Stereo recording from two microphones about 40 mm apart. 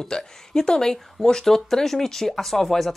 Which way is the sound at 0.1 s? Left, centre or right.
Centre.